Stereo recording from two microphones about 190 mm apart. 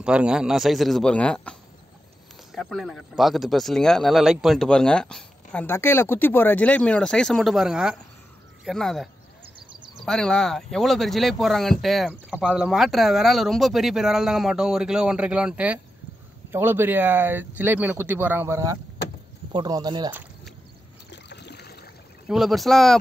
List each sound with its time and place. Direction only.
0.0 s speech: 5° right (ahead or behind); by 20.2 s 25° right (ahead or behind)
21.1 s boat: 65° left (ahead or behind)
22.3 s speech: centre (ahead or behind)